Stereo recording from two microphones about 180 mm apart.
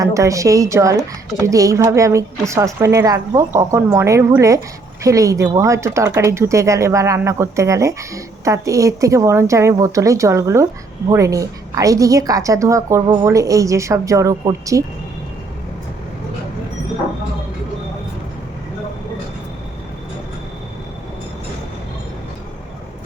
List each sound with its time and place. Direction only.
0.0 s speech: 15° right (ahead or behind)